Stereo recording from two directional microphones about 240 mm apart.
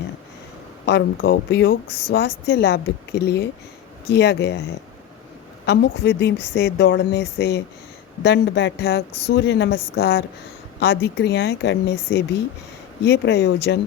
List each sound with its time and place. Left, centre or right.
0.9 s a woman's voice: left
1.9 s a woman's voice: left
2.1 s a woman's voice: left
5.6 s a woman's voice: left